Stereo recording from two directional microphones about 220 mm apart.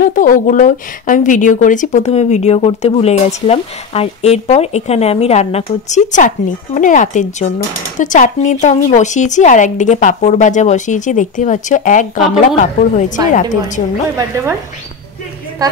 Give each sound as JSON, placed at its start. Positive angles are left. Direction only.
{"t": 0.0, "sound": "speech", "side_deg": 40}